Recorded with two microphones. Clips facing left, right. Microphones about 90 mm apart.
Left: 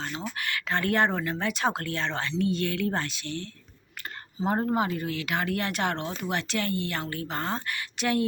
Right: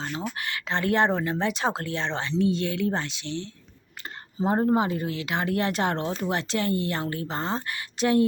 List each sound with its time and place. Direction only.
0.3 s speech: 25° right (ahead or behind)
4.4 s speech: 45° right (ahead or behind)
4.7 s speech: 25° right (ahead or behind)